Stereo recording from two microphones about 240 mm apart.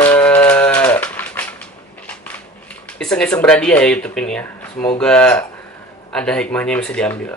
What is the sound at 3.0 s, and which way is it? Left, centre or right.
Speech, centre.